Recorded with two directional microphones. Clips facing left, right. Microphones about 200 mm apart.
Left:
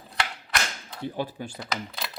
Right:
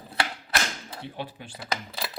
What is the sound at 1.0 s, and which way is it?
Speech, 40° left (ahead or behind).